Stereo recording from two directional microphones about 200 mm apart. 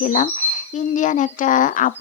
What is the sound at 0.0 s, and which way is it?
Speech, 40° left (ahead or behind).